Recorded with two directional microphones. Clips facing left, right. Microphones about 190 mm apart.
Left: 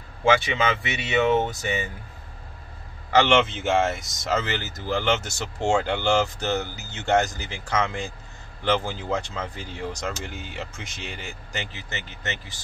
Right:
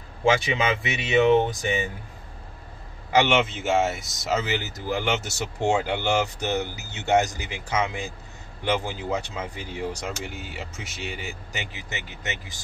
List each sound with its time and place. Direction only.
0.3 s speech: 20° right (ahead or behind)
3.1 s speech: 10° right (ahead or behind)